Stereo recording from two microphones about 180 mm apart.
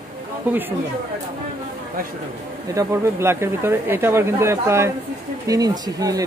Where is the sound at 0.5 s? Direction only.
10° right (ahead or behind).